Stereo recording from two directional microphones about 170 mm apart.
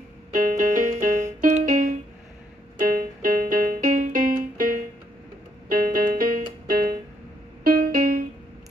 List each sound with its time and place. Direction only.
0.3 s music: 50° right (ahead or behind)